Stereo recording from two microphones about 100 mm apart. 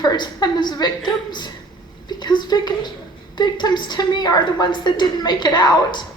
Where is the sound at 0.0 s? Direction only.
45° left (ahead or behind).